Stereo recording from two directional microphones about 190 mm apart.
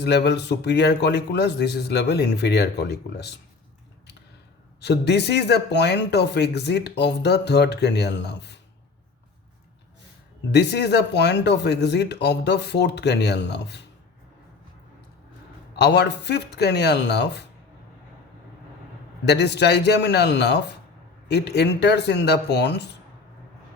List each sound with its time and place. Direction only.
0.0 s speech: 60° left (ahead or behind)
4.8 s speech: 60° left (ahead or behind)
10.5 s speech: 60° left (ahead or behind)
15.7 s speech: 60° left (ahead or behind)
19.2 s speech: 60° left (ahead or behind)